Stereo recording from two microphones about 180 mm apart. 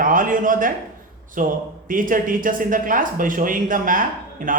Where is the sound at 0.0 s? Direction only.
50° right (ahead or behind).